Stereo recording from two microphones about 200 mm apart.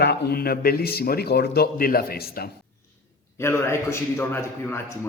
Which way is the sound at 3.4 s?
15° left (ahead or behind).